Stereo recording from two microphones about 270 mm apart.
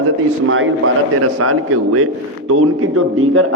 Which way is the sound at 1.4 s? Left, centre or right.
Right.